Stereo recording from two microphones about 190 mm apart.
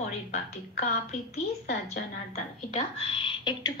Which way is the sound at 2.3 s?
35° left (ahead or behind).